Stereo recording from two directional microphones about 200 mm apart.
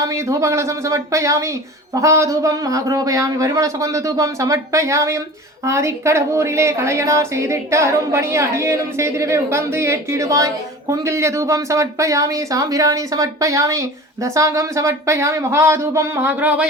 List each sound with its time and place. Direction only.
0.0 s speech: 15° right (ahead or behind)